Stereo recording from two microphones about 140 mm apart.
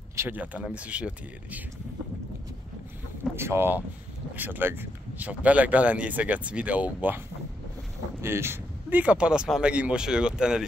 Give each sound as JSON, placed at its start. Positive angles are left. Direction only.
{"t": 0.1, "sound": "speech", "side_deg": -15}
{"t": 3.3, "sound": "speech", "side_deg": -15}
{"t": 8.2, "sound": "speech", "side_deg": -20}